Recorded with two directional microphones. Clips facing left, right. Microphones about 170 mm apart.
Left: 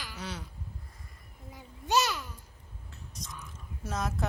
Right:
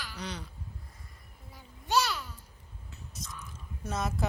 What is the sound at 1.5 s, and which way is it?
Babbling, 20° left (ahead or behind).